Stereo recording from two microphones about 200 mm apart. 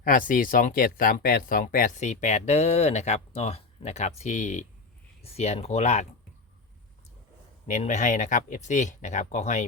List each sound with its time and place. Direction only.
0.0 s speech: 45° left (ahead or behind)
7.7 s speech: 35° left (ahead or behind)